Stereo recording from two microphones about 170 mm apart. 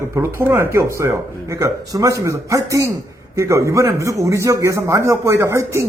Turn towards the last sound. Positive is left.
turn(degrees=-15)  # may be behind; listen again after turning